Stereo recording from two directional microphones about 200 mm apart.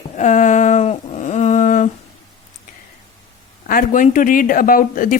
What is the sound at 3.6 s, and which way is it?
Speech, 45° left (ahead or behind).